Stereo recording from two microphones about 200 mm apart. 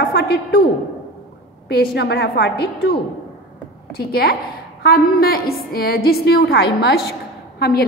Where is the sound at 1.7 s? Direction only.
55° left (ahead or behind).